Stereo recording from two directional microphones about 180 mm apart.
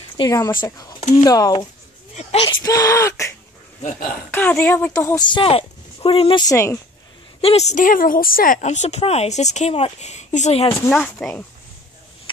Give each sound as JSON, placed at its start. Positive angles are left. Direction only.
{"t": 0.2, "sound": "speech", "side_deg": 20}
{"t": 2.1, "sound": "a woman's voice", "side_deg": 35}
{"t": 2.6, "sound": "speech", "side_deg": 20}
{"t": 7.4, "sound": "a woman's voice", "side_deg": 40}
{"t": 10.7, "sound": "speech", "side_deg": 10}